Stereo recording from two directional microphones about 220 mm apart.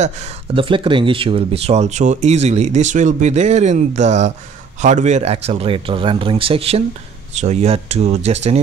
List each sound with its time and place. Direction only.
0.0 s speech: 25° right (ahead or behind)